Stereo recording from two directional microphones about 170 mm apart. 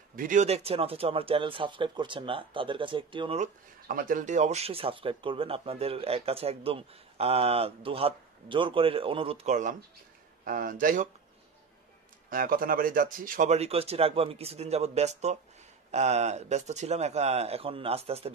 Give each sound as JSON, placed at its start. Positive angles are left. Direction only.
{"t": 0.1, "sound": "speech", "side_deg": -50}
{"t": 3.8, "sound": "speech", "side_deg": -55}
{"t": 12.3, "sound": "speech", "side_deg": -55}